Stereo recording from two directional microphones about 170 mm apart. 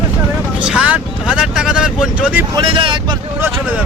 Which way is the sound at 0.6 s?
5° right (ahead or behind).